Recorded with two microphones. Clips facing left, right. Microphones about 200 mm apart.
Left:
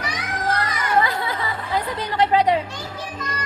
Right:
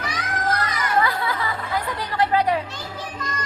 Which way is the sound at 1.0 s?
20° left (ahead or behind).